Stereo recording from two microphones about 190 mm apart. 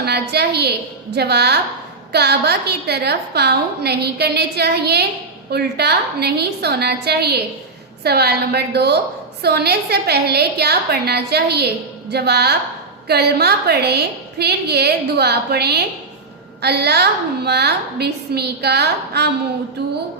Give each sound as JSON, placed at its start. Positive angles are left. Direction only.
{"t": 0.0, "sound": "a woman's voice", "side_deg": -60}